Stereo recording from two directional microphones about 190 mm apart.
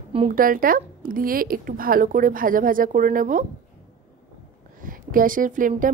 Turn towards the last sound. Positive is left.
turn(degrees=-45)  # may be behind; listen again after turning